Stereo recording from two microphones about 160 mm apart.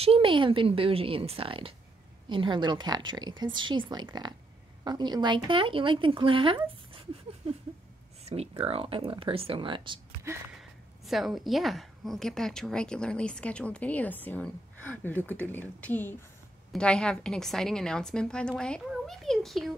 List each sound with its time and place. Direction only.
0.0 s a woman's voice: 35° right (ahead or behind)
10.6 s a woman's voice: centre (ahead or behind)